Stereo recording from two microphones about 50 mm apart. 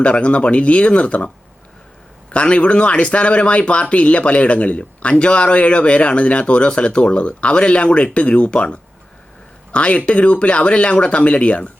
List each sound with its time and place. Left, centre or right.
0.0 s speech: left
2.3 s speech: left